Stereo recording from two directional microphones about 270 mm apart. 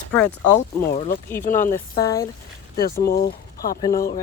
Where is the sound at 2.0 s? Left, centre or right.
Centre.